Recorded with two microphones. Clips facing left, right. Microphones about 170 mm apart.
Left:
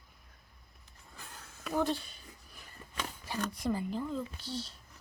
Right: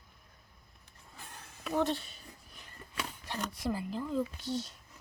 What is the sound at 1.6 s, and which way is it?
Speech, centre (ahead or behind).